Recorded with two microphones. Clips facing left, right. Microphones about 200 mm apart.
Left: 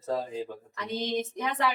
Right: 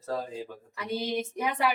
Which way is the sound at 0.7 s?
10° right (ahead or behind).